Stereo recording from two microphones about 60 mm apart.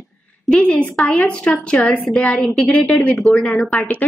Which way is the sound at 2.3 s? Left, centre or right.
Centre.